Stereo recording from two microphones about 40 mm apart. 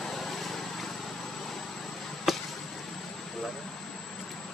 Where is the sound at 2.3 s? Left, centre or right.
Centre.